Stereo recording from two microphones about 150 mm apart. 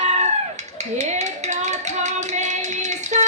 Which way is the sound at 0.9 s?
50° right (ahead or behind).